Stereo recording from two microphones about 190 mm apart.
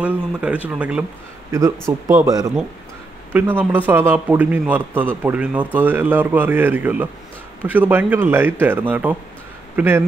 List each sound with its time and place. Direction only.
0.0 s a man's voice: 5° right (ahead or behind)